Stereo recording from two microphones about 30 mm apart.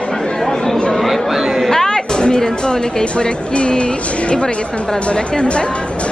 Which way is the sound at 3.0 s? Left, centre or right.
Left.